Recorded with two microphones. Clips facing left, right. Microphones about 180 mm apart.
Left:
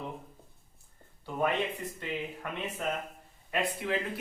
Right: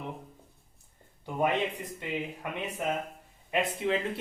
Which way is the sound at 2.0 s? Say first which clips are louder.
Right 4 dB; 15° right (ahead or behind).